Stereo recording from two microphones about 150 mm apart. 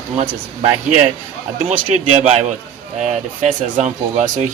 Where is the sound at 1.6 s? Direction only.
50° right (ahead or behind).